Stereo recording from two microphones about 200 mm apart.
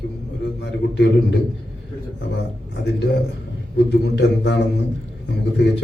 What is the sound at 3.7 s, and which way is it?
A man's voice, 60° left (ahead or behind).